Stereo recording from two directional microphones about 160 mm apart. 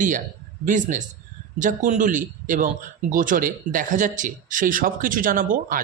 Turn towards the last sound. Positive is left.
turn(degrees=-60)  # may be behind; listen again after turning